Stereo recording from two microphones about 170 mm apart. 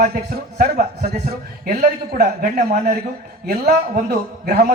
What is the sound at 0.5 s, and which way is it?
A man's voice, 65° right (ahead or behind).